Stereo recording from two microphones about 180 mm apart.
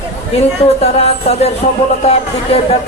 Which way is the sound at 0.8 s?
35° left (ahead or behind).